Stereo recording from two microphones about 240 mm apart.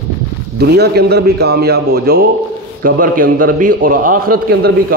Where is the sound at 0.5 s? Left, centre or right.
Right.